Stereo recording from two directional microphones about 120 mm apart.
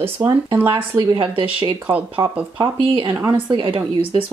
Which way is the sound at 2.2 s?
25° right (ahead or behind).